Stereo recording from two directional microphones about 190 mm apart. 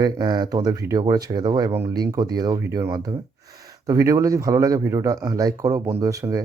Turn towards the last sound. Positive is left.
turn(degrees=-15)  # may be behind; listen again after turning